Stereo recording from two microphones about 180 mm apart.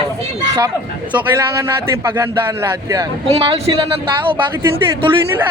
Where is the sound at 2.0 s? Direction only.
15° right (ahead or behind).